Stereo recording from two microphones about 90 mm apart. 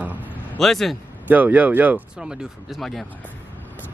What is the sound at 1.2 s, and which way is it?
Speech, 20° right (ahead or behind).